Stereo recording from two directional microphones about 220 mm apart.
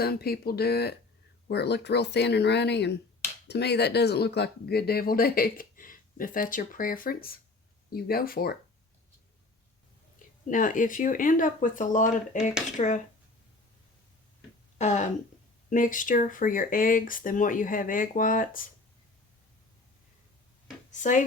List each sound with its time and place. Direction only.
0.0 s speech: 45° left (ahead or behind)
10.5 s speech: 35° left (ahead or behind)
14.8 s throat clearing: 30° left (ahead or behind)
15.7 s speech: 35° left (ahead or behind)
20.9 s speech: 35° left (ahead or behind)